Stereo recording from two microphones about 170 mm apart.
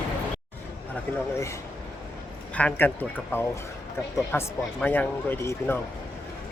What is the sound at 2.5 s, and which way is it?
Speech, 10° left (ahead or behind).